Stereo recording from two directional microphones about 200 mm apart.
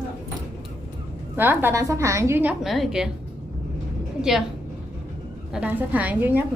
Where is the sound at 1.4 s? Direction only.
10° right (ahead or behind).